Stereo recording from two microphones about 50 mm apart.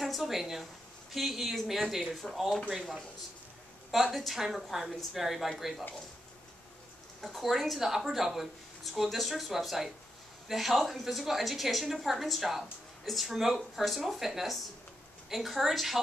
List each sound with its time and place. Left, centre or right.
0.0 s a woman's voice: centre
4.1 s a woman's voice: centre
7.2 s a woman's voice: centre